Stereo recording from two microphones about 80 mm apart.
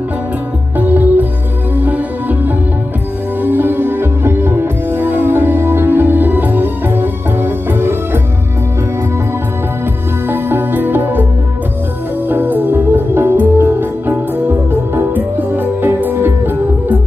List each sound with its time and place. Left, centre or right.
0.7 s music: right
10.2 s music: right
12.3 s music: right